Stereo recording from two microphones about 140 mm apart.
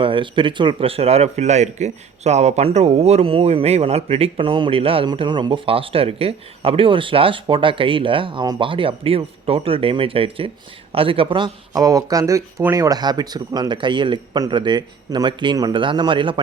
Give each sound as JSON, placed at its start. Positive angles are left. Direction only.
{"t": 0.0, "sound": "speech", "side_deg": -35}
{"t": 11.8, "sound": "speech", "side_deg": -25}